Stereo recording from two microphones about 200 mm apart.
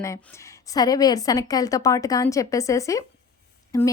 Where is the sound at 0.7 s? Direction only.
20° left (ahead or behind).